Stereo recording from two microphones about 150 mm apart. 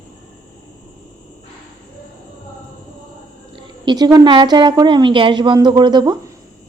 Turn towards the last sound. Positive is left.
turn(degrees=-30)  # may be behind; listen again after turning